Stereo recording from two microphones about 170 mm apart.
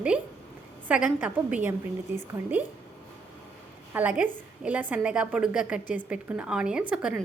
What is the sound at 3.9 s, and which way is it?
A woman's voice, 10° right (ahead or behind).